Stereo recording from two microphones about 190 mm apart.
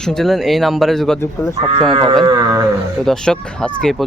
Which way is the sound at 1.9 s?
25° right (ahead or behind).